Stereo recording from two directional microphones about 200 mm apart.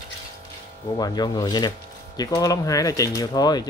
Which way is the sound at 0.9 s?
20° left (ahead or behind).